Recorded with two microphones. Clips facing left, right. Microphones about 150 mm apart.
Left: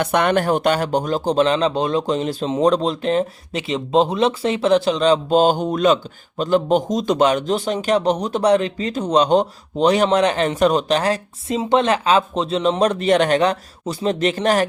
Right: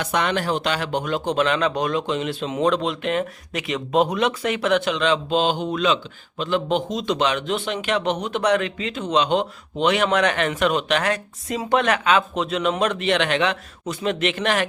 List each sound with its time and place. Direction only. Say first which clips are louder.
0.0 s speech: left 5 dB; 55° left (ahead or behind); by 14.7 s 40° left (ahead or behind)